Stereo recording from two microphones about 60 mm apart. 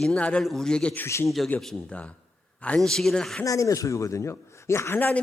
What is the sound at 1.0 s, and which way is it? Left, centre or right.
Speech, left.